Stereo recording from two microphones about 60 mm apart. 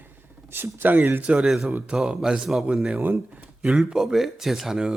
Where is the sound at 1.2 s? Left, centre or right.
Centre.